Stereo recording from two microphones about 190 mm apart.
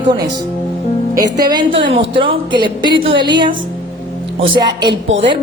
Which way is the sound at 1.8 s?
25° right (ahead or behind).